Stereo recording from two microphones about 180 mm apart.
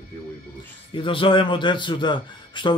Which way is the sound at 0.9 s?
30° left (ahead or behind).